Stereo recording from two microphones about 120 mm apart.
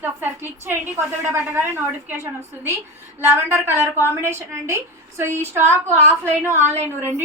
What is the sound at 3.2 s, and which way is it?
A woman's voice, 20° right (ahead or behind).